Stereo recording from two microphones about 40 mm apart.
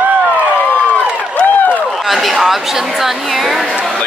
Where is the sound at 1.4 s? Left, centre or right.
Left.